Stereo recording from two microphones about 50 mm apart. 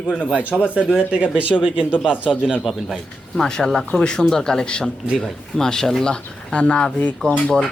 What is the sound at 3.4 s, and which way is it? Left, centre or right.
Speech, centre.